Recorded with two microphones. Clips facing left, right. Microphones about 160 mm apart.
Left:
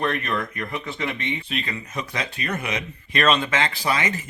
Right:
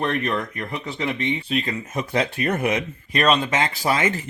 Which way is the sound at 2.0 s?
55° right (ahead or behind).